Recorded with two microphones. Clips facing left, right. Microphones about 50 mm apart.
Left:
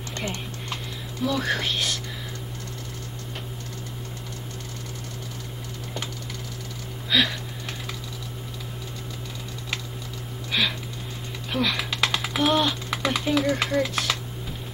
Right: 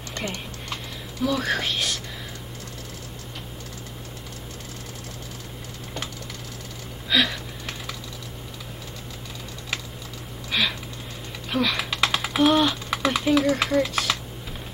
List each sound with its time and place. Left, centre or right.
0.1 s typing: right
1.2 s speech: centre
7.1 s a sound: centre
10.5 s typing: centre